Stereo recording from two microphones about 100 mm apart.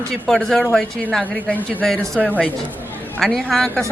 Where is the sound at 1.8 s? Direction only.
5° left (ahead or behind).